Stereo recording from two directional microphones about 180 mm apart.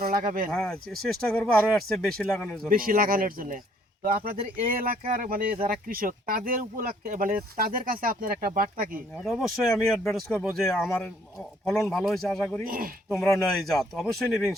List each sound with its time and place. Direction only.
0.0 s speech: 50° right (ahead or behind)
0.5 s speech: 5° left (ahead or behind)
2.6 s speech: 50° right (ahead or behind)
9.6 s speech: centre (ahead or behind)
12.6 s speech: 50° right (ahead or behind)
13.1 s speech: centre (ahead or behind)